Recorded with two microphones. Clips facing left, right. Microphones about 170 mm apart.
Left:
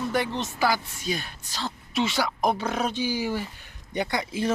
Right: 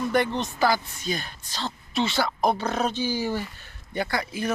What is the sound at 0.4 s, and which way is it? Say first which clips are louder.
Speech: right 2 dB; 10° left (ahead or behind).